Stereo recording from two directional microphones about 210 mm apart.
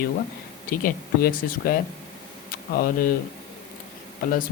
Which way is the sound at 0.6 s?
45° left (ahead or behind).